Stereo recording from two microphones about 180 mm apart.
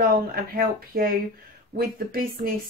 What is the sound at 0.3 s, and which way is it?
Speech, 55° right (ahead or behind).